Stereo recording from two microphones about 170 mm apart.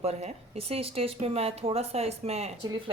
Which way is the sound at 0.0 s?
40° right (ahead or behind).